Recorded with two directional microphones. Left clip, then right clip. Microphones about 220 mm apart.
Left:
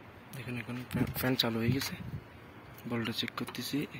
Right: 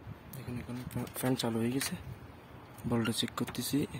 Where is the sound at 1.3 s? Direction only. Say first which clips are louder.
Left 2 dB; 15° right (ahead or behind).